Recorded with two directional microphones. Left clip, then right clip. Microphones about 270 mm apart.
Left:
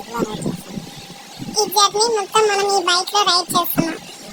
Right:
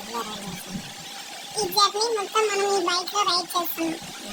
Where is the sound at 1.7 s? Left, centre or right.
Centre.